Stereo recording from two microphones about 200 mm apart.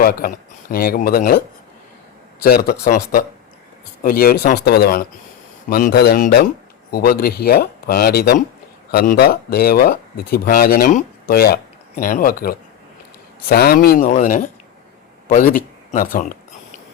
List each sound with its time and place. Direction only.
0.0 s speech: 45° left (ahead or behind)
2.4 s speech: 50° left (ahead or behind)
4.0 s speech: 50° left (ahead or behind)